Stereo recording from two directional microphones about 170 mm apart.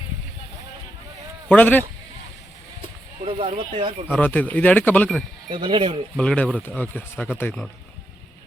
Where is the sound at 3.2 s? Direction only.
35° right (ahead or behind).